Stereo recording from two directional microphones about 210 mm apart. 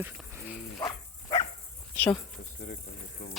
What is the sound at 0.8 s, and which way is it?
Bow-wow, 20° left (ahead or behind).